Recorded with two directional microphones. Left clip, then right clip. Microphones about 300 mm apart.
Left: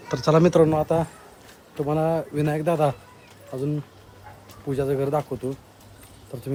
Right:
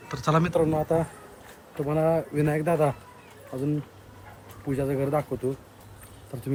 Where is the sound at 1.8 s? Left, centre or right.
Centre.